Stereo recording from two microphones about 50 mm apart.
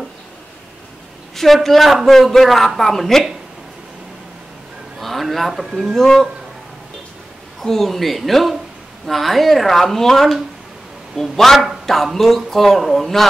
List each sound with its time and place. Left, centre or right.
1.3 s a man's voice: centre
4.9 s a sound: centre
5.7 s a man's voice: centre
5.9 s a man's voice: centre
7.6 s a man's voice: centre